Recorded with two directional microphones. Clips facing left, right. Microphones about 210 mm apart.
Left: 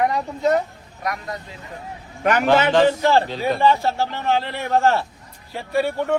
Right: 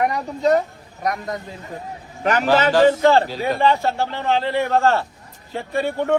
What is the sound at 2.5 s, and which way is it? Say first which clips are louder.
A man's voice: right 2 dB; 5° right (ahead or behind).